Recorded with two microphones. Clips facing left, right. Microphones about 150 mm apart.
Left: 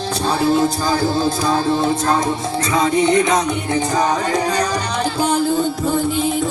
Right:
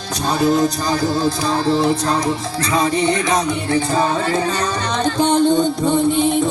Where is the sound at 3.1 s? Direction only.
20° left (ahead or behind).